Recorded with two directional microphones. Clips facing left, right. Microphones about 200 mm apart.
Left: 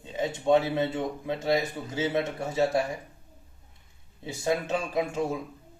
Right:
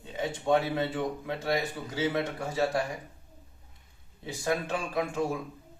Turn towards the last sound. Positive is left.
turn(degrees=20)  # may be behind; listen again after turning